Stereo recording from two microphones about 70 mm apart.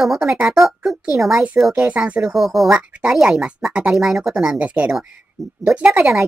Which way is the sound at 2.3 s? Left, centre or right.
Centre.